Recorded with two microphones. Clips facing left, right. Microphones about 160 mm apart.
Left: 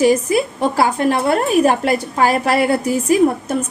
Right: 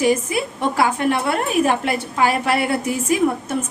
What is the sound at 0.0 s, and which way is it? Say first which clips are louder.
A woman's voice: left 5 dB; 35° left (ahead or behind).